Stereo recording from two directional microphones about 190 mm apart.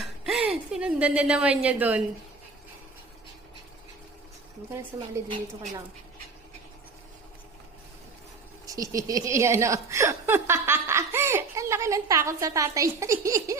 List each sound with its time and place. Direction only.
0.0 s a sound: 5° right (ahead or behind)
4.9 s a woman's voice: 25° right (ahead or behind)
8.6 s speech: 20° right (ahead or behind)